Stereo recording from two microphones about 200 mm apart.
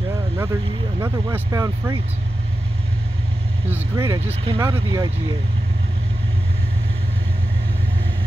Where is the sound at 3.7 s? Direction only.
15° right (ahead or behind).